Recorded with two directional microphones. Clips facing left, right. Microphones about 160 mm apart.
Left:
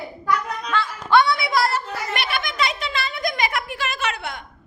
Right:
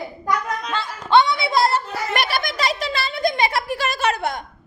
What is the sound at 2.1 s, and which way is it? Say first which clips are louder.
A woman's voice: right 3 dB; 40° right (ahead or behind).